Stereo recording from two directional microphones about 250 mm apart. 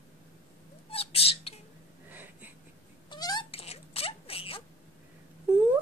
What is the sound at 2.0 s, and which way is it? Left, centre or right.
Wheeze, centre.